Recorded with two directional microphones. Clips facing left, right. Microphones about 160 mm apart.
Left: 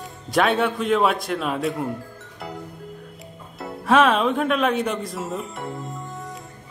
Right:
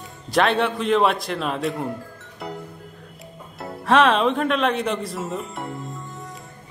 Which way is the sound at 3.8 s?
Centre (ahead or behind).